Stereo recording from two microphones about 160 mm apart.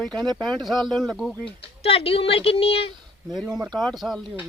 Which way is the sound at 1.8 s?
40° left (ahead or behind).